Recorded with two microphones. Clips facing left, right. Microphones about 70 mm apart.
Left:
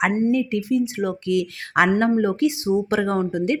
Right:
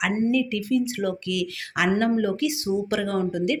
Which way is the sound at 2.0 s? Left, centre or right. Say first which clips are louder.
Left 4 dB; left.